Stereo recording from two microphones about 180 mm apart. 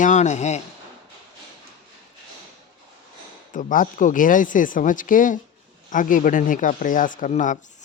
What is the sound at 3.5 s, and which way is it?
Speech, 45° left (ahead or behind).